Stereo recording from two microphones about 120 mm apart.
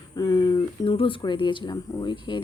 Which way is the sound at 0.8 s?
45° left (ahead or behind).